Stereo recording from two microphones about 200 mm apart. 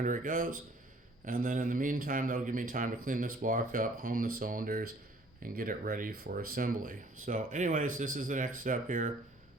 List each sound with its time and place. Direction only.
0.0 s a man's voice: 40° right (ahead or behind)